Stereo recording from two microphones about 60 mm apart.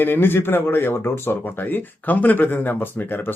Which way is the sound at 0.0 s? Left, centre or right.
Left.